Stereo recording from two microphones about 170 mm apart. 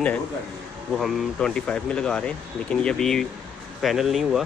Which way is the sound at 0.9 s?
Centre (ahead or behind).